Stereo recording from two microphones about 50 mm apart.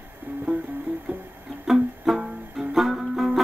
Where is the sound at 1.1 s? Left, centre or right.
Right.